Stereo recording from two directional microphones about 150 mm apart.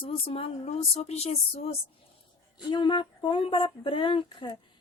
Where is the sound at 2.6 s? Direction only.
30° left (ahead or behind).